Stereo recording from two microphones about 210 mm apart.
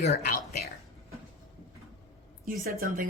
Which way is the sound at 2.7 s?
40° right (ahead or behind).